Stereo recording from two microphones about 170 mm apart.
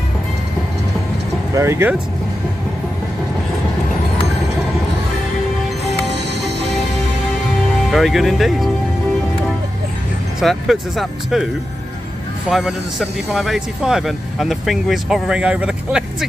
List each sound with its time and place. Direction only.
1.5 s speech: 15° right (ahead or behind)
7.9 s speech: centre (ahead or behind)
10.4 s speech: centre (ahead or behind)
12.4 s speech: 5° right (ahead or behind)